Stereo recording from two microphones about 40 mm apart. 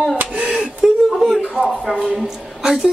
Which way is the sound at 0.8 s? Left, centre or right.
Centre.